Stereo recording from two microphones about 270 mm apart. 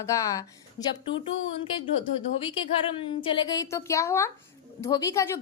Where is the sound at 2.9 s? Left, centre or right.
Centre.